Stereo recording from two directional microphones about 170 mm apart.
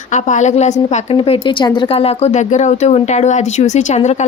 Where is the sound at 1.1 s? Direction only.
30° left (ahead or behind).